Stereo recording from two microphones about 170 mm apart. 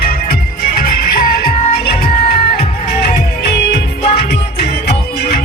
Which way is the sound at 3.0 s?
75° left (ahead or behind).